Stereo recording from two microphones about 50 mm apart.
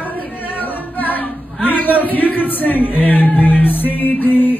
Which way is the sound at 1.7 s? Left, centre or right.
Left.